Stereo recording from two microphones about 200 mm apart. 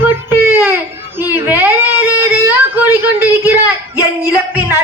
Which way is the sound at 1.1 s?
10° right (ahead or behind).